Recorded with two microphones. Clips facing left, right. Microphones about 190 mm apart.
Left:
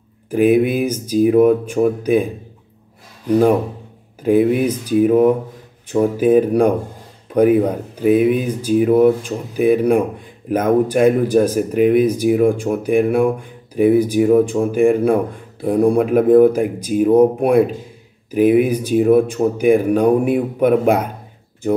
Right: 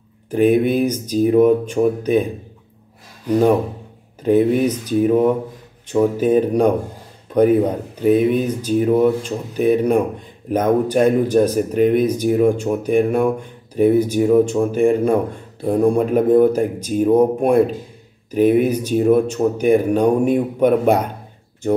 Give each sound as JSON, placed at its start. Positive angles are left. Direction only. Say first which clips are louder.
{"t": 0.3, "sound": "speech", "louder": "left 1 dB", "side_deg": 10}
{"t": 3.3, "sound": "speech", "louder": "left 1 dB", "side_deg": 10}